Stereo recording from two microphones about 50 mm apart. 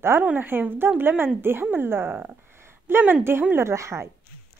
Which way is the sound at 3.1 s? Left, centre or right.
Right.